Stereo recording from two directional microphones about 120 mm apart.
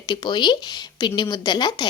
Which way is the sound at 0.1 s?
40° left (ahead or behind).